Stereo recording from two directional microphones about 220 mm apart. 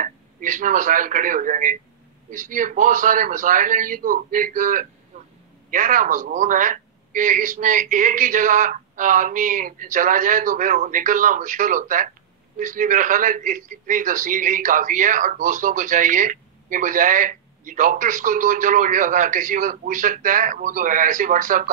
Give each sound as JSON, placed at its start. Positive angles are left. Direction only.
{"t": 0.0, "sound": "a man's voice", "side_deg": -35}
{"t": 5.1, "sound": "a sound", "side_deg": -30}
{"t": 5.7, "sound": "a man's voice", "side_deg": -35}